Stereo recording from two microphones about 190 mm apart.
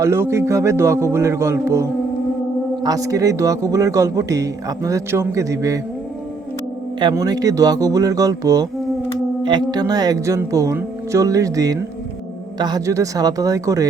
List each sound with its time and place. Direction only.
0.0 s speech: 15° right (ahead or behind)
7.0 s speech: 20° right (ahead or behind)